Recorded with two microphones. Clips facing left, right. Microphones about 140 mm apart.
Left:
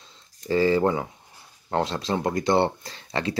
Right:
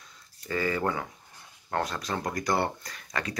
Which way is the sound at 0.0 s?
25° left (ahead or behind).